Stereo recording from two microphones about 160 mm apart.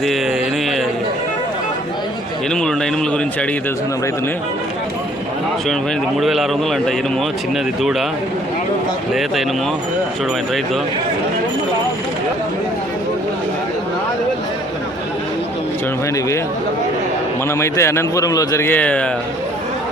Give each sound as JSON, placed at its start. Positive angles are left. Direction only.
{"t": 2.5, "sound": "a man's voice", "side_deg": 5}
{"t": 6.1, "sound": "a man's voice", "side_deg": 0}
{"t": 17.5, "sound": "a man's voice", "side_deg": 15}